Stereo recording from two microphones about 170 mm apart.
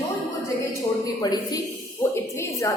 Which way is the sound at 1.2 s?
25° left (ahead or behind).